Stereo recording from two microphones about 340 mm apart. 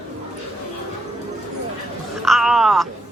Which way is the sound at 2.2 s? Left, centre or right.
Centre.